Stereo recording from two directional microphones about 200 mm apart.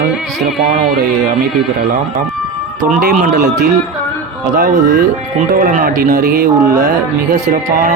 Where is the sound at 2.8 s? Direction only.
40° right (ahead or behind).